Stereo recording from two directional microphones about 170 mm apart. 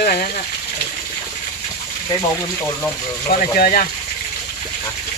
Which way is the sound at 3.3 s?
55° left (ahead or behind).